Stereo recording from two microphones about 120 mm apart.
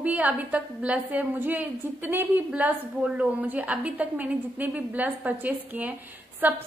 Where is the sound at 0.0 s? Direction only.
15° right (ahead or behind).